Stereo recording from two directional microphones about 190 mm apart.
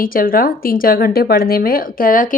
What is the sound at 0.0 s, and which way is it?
Speech, 50° left (ahead or behind).